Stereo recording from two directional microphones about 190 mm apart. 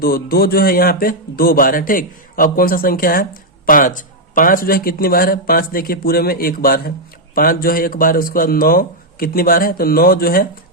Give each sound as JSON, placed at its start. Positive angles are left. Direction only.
{"t": 0.0, "sound": "a man's voice", "side_deg": 50}